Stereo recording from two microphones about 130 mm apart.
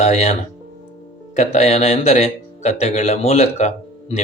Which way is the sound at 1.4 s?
60° left (ahead or behind).